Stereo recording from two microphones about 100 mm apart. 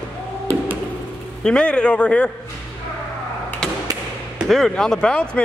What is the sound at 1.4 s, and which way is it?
Speech, 10° left (ahead or behind).